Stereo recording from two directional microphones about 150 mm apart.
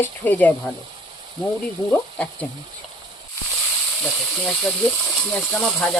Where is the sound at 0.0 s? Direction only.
10° left (ahead or behind).